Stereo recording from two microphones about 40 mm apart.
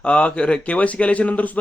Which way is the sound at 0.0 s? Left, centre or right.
Left.